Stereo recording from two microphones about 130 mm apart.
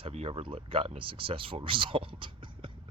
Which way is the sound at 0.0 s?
45° right (ahead or behind).